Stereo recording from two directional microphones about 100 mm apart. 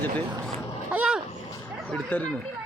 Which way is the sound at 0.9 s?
15° right (ahead or behind).